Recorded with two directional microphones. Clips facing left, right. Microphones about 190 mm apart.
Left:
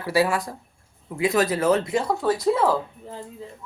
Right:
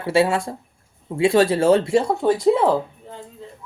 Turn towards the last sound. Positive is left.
turn(degrees=0)  # may be behind; listen again after turning